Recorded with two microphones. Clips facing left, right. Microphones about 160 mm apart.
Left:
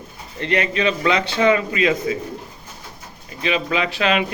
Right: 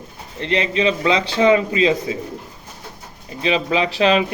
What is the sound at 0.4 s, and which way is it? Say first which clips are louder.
A man's voice: right 1 dB; 25° right (ahead or behind).